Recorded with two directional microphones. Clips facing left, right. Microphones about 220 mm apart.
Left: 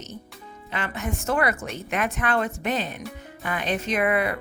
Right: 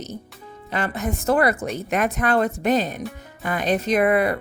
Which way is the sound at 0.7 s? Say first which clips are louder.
Right 5 dB; 40° right (ahead or behind).